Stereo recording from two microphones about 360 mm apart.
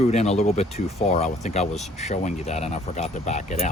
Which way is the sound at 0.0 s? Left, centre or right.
Centre.